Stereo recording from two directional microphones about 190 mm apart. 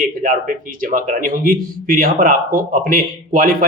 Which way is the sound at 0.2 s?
45° right (ahead or behind).